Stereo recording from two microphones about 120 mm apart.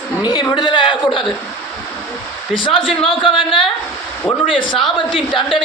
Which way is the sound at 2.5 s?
45° left (ahead or behind).